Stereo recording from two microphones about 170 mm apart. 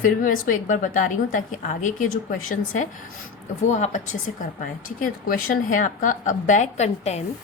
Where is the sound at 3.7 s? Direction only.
45° left (ahead or behind).